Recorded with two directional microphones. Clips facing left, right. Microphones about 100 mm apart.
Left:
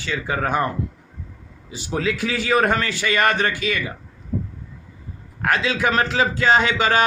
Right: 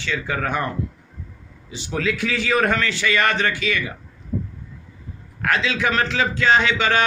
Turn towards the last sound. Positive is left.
turn(degrees=40)  # may be behind; listen again after turning